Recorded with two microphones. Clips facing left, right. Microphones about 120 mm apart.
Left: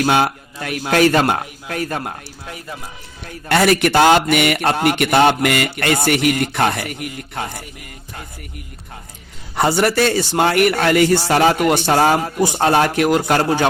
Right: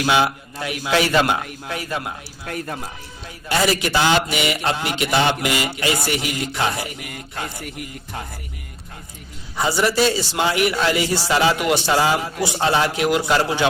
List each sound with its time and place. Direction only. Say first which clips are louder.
0.0 s a man's voice: left 2 dB; 45° left (ahead or behind)
3.5 s speech: left 5 dB; 60° left (ahead or behind)
9.6 s a man's voice: left 3 dB; 55° left (ahead or behind)